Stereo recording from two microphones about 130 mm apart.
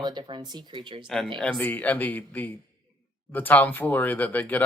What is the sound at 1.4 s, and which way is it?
Speech, 10° left (ahead or behind).